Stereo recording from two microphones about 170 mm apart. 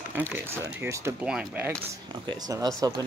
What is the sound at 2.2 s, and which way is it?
Speech, 20° right (ahead or behind).